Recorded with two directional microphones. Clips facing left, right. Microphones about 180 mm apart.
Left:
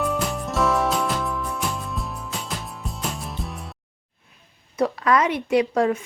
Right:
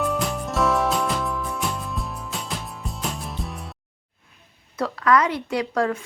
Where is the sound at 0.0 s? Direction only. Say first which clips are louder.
Even; centre (ahead or behind).